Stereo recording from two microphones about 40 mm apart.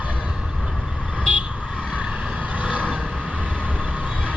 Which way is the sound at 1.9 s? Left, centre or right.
Right.